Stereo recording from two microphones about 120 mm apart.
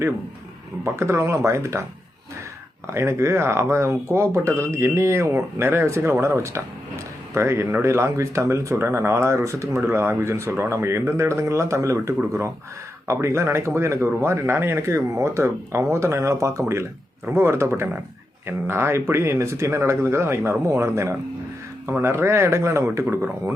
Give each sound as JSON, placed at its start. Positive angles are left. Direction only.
{"t": 0.9, "sound": "speech", "side_deg": -20}
{"t": 2.8, "sound": "speech", "side_deg": -20}